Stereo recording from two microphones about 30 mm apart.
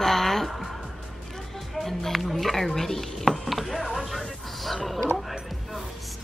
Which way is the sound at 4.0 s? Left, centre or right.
Centre.